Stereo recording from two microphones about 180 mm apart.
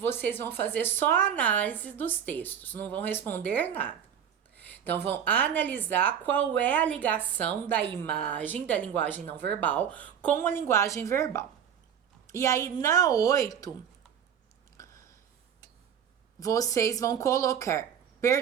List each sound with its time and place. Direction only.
0.0 s a woman's voice: 10° left (ahead or behind)
14.8 s a sound: 20° left (ahead or behind)
16.4 s speech: 20° left (ahead or behind)